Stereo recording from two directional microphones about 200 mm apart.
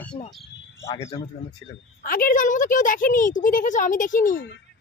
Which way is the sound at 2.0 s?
45° left (ahead or behind).